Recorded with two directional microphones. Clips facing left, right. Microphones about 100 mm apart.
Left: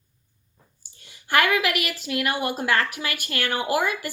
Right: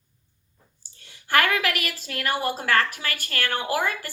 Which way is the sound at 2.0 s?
15° left (ahead or behind).